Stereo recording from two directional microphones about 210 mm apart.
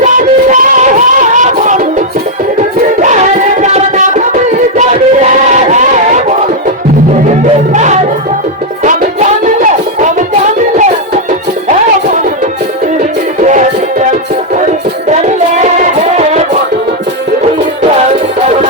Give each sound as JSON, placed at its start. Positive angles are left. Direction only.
{"t": 0.0, "sound": "music", "side_deg": -40}
{"t": 4.8, "sound": "a sound", "side_deg": -35}
{"t": 7.7, "sound": "music", "side_deg": -35}
{"t": 13.4, "sound": "music", "side_deg": -35}